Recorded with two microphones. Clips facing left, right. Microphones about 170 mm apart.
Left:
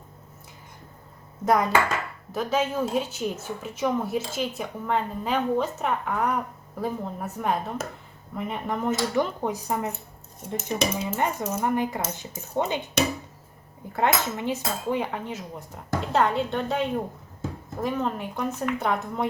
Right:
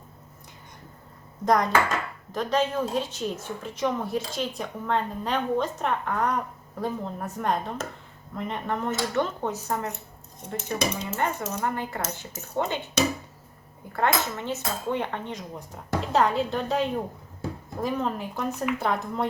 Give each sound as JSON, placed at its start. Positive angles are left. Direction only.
{"t": 1.5, "sound": "a woman's voice", "side_deg": 5}
{"t": 11.0, "sound": "a woman's voice", "side_deg": 10}